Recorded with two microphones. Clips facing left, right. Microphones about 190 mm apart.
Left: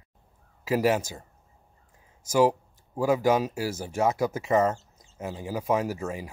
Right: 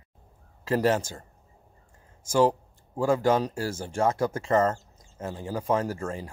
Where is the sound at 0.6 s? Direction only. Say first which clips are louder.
Even; 10° left (ahead or behind).